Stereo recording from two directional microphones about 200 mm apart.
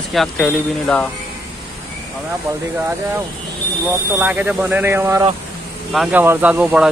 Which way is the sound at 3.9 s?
10° right (ahead or behind).